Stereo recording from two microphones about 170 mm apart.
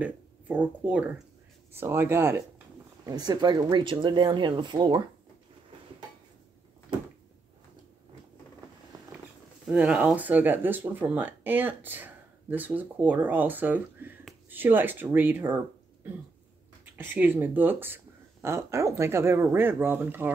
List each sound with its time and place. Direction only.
0.0 s speech: 10° right (ahead or behind); by 5.0 s 25° right (ahead or behind)
9.7 s speech: 5° right (ahead or behind)